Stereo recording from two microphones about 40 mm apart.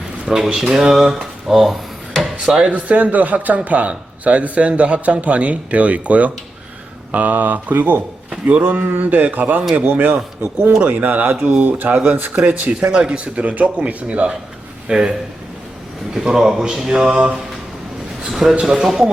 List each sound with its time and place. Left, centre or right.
0.3 s speech: centre
2.6 s speech: right
8.4 s speech: right
9.0 s speech: right
10.8 s speech: right
11.0 s speech: right
12.3 s speech: right
14.8 s speech: centre
16.1 s speech: centre
18.3 s speech: centre